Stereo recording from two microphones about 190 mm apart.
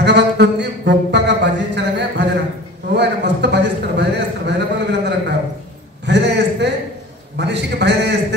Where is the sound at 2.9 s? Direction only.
65° right (ahead or behind).